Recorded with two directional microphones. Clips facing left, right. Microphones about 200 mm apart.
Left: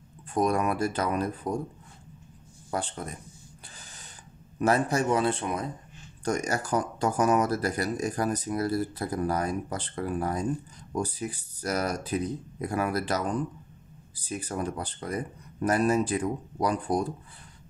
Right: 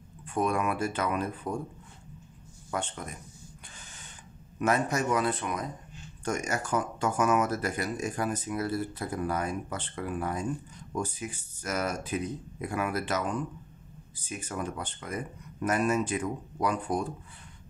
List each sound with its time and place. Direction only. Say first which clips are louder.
0.3 s speech: left 3 dB; 40° left (ahead or behind)
2.7 s speech: left 2 dB; 35° left (ahead or behind)
4.6 s speech: left 3 dB; 35° left (ahead or behind)